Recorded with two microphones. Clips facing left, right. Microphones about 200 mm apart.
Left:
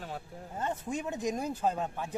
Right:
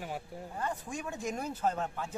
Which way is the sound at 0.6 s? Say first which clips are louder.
Left 4 dB; 20° left (ahead or behind).